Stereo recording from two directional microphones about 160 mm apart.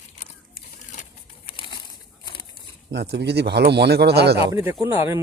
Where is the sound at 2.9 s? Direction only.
90° right.